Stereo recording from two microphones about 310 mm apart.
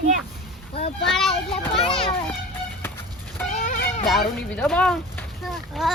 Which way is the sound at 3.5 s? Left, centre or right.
Left.